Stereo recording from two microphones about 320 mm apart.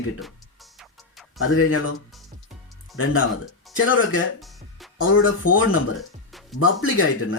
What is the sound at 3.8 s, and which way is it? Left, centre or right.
Speech, left.